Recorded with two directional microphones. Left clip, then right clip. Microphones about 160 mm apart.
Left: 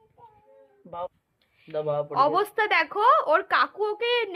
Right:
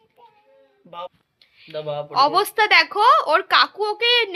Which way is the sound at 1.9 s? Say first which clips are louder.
Even; 50° left (ahead or behind).